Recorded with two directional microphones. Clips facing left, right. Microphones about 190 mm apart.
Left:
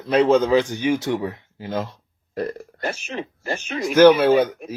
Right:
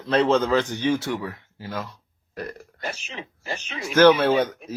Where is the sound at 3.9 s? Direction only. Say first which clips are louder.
Left 3 dB; 10° left (ahead or behind).